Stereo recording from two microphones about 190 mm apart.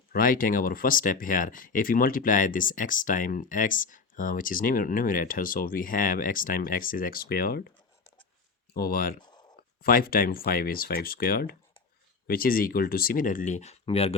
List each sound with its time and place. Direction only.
0.1 s speech: 50° left (ahead or behind)
8.7 s speech: 50° left (ahead or behind); by 14.2 s 30° left (ahead or behind)